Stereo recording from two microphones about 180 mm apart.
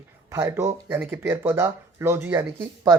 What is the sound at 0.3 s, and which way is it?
Speech, 15° right (ahead or behind).